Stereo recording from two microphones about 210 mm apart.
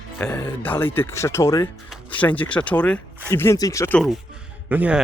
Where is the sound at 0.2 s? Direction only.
10° left (ahead or behind).